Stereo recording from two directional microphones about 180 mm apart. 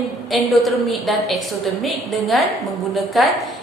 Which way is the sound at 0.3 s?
Centre (ahead or behind).